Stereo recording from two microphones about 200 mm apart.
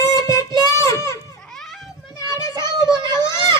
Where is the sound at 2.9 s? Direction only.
20° right (ahead or behind).